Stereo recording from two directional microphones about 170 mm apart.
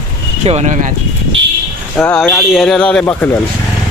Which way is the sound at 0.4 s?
40° right (ahead or behind).